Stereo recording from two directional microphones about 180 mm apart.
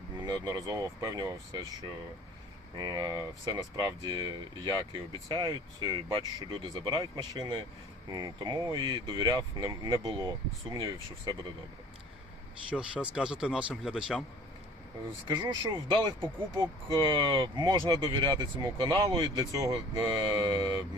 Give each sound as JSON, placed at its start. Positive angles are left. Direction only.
{"t": 0.3, "sound": "speech", "side_deg": -20}
{"t": 2.7, "sound": "speech", "side_deg": -25}
{"t": 12.7, "sound": "speech", "side_deg": -5}
{"t": 15.3, "sound": "speech", "side_deg": -25}